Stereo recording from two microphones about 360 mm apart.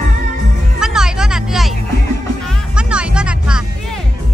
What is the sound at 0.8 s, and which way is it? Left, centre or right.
Music, centre.